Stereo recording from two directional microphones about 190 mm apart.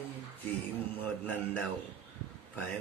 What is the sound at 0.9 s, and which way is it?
Speech, 5° left (ahead or behind).